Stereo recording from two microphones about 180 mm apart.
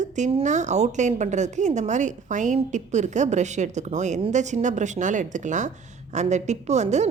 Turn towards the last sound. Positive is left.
turn(degrees=-40)  # may be behind; listen again after turning